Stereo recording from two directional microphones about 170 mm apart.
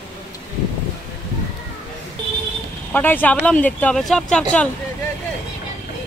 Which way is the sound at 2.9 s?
10° left (ahead or behind).